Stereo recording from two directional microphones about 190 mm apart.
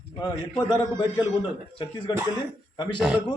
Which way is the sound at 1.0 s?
25° left (ahead or behind).